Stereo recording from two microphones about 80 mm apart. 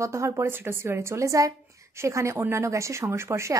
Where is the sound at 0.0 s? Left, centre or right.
Right.